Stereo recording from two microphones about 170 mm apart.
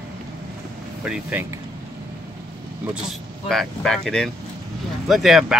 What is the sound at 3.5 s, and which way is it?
Speech, centre (ahead or behind).